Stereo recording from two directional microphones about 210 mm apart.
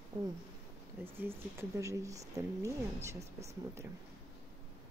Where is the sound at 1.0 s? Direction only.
10° right (ahead or behind).